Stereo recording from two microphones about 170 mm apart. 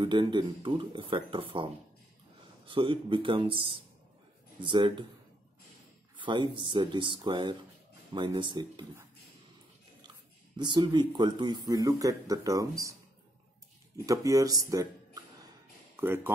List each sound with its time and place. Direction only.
0.0 s speech: 30° right (ahead or behind)
6.1 s speech: 25° right (ahead or behind)
10.6 s speech: 25° right (ahead or behind)
14.0 s speech: 20° right (ahead or behind)